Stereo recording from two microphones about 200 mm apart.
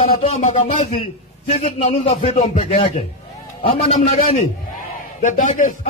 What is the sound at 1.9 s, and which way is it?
A man's voice, 30° left (ahead or behind).